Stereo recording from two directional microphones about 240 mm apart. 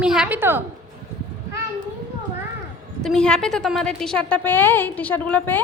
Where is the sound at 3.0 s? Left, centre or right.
Centre.